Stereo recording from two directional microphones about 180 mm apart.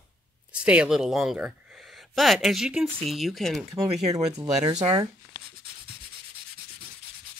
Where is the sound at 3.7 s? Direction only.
20° right (ahead or behind).